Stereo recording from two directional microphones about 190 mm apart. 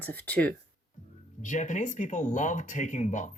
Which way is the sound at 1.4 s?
40° left (ahead or behind).